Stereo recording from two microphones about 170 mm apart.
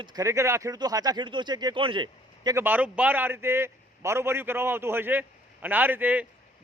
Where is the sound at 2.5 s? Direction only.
10° right (ahead or behind).